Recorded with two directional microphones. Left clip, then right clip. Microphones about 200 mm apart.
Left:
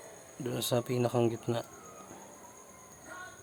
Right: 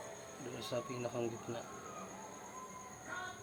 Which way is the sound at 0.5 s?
70° left (ahead or behind).